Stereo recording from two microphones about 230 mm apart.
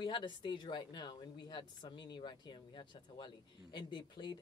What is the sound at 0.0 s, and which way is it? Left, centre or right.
Speech, centre.